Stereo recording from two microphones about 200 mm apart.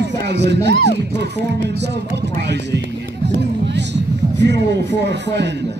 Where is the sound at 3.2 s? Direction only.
60° right (ahead or behind).